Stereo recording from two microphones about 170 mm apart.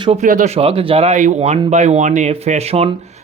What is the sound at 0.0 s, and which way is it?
Speech, 35° right (ahead or behind).